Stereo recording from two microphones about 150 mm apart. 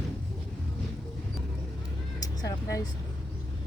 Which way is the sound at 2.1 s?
25° left (ahead or behind).